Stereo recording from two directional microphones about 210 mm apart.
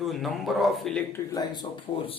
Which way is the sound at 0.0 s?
Centre (ahead or behind).